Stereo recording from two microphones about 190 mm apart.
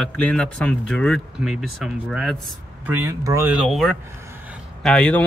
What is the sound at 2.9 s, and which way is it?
Speech, 10° right (ahead or behind).